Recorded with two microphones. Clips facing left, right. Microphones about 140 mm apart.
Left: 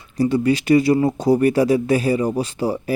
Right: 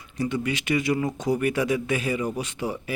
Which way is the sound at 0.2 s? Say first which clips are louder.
Left 9 dB; 35° left (ahead or behind).